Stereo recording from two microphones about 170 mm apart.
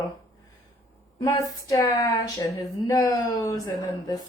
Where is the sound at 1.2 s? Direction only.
20° left (ahead or behind).